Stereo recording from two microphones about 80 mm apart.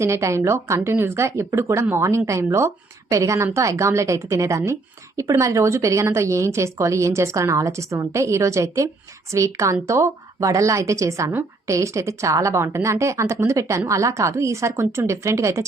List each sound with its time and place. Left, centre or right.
0.0 s a woman's voice: right